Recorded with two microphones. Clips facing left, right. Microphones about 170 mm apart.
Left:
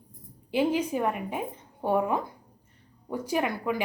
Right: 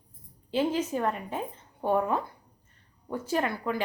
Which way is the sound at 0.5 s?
10° left (ahead or behind).